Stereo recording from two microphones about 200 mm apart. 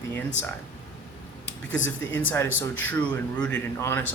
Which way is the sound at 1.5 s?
65° left (ahead or behind).